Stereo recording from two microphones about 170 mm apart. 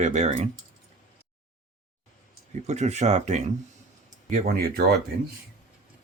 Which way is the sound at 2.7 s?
40° right (ahead or behind).